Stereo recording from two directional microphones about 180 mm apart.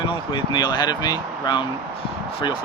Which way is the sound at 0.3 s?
25° left (ahead or behind).